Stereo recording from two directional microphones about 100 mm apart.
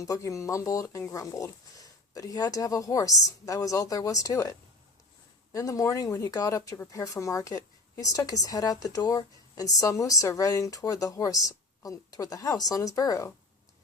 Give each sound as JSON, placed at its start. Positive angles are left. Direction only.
{"t": 0.0, "sound": "a woman's voice", "side_deg": 35}